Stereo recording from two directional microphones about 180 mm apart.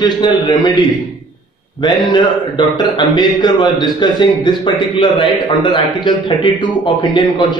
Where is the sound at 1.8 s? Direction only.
25° left (ahead or behind).